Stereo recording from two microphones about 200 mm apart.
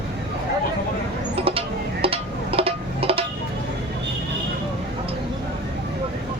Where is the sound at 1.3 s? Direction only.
30° right (ahead or behind).